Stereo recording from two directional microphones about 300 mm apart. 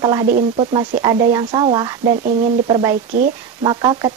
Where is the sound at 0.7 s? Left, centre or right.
Centre.